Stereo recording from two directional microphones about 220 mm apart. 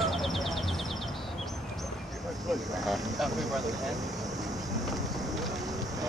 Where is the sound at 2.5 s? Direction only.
Centre (ahead or behind).